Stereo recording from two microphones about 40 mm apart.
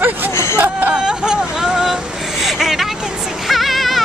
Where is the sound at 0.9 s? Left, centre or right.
Right.